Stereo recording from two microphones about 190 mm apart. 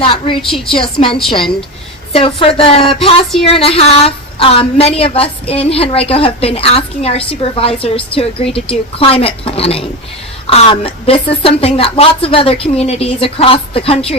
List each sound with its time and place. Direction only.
0.0 s a woman's voice: 30° left (ahead or behind)
0.4 s a woman's voice: centre (ahead or behind)
0.8 s a woman's voice: 25° left (ahead or behind)